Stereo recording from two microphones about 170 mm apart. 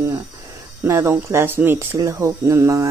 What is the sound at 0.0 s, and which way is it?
Speech, 20° right (ahead or behind).